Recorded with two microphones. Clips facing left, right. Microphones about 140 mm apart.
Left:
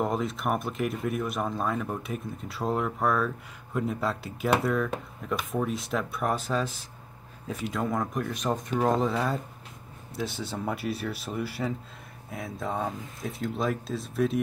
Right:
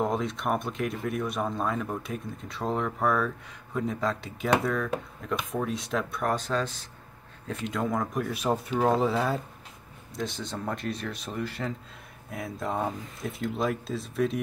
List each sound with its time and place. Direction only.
0.0 s speech: centre (ahead or behind)